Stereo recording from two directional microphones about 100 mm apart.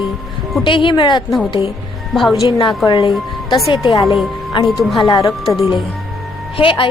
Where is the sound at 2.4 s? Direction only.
50° left (ahead or behind).